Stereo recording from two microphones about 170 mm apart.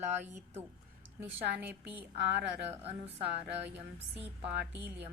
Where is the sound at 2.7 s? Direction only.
35° right (ahead or behind).